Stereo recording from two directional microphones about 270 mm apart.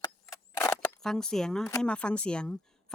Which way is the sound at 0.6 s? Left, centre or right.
Centre.